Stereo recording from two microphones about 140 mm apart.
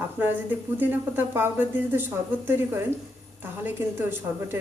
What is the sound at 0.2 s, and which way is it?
Speech, 10° right (ahead or behind).